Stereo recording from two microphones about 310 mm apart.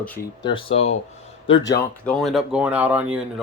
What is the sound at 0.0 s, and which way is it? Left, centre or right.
Speech, centre.